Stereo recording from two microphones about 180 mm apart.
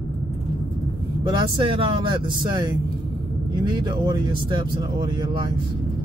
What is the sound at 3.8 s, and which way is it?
Speech, 25° right (ahead or behind).